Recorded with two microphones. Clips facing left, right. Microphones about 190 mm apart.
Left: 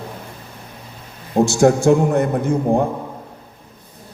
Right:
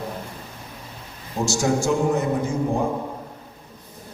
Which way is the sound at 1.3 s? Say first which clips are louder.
Left 8 dB; 60° left (ahead or behind).